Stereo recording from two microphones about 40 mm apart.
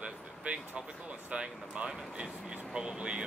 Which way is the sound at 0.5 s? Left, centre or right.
Right.